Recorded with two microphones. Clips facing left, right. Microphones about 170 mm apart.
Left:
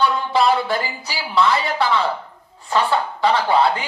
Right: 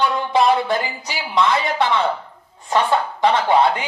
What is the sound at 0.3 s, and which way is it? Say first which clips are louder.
Speech: right 2 dB; 20° right (ahead or behind).